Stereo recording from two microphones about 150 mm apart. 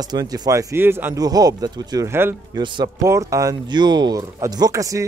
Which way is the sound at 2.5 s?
30° right (ahead or behind).